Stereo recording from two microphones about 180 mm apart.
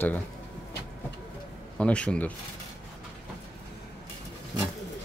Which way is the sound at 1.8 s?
5° left (ahead or behind).